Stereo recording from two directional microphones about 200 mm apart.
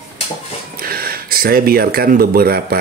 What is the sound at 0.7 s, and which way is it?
Speech, 50° right (ahead or behind).